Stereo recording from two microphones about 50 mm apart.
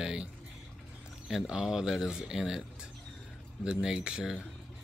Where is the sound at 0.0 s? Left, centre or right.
Centre.